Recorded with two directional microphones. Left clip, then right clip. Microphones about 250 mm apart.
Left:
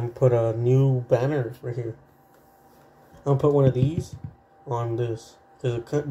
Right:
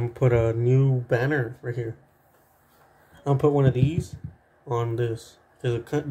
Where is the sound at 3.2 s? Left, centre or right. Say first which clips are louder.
Left 1 dB; right.